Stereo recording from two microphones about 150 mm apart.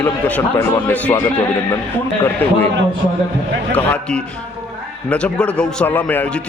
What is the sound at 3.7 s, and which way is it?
A man's voice, 5° left (ahead or behind).